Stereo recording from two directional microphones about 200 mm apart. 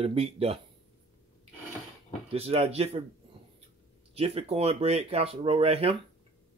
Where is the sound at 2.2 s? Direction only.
30° right (ahead or behind).